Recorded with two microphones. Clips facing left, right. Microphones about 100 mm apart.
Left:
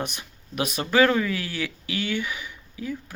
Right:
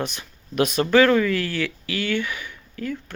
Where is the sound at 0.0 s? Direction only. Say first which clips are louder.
Right 3 dB; 15° left (ahead or behind).